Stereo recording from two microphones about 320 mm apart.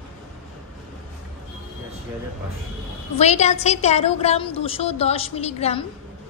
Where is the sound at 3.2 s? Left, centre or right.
Left.